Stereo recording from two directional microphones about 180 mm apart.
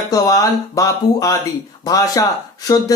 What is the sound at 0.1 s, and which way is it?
Speech, 20° left (ahead or behind).